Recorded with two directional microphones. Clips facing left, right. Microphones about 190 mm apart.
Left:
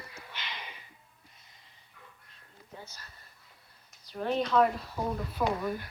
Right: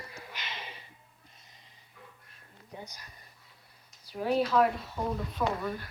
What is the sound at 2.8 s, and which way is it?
Speech, 15° right (ahead or behind).